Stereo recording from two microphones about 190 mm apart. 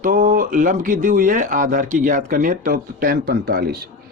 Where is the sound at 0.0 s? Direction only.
45° right (ahead or behind).